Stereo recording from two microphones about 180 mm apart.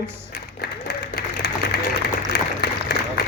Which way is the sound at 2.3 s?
60° left (ahead or behind).